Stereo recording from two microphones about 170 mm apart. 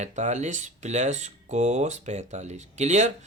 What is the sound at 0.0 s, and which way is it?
Speech, 45° right (ahead or behind).